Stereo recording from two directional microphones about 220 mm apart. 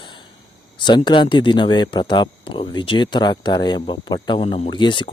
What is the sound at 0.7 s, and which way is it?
Speech, 20° left (ahead or behind).